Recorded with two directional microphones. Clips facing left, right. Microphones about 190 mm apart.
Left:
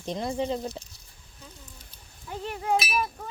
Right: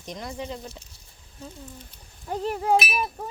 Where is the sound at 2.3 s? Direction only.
40° right (ahead or behind).